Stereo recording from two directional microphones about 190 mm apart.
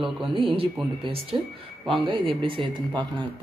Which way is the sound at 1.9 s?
25° right (ahead or behind).